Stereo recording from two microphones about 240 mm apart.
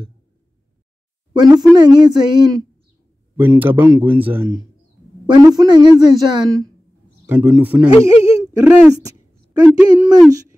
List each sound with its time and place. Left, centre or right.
1.3 s speech: centre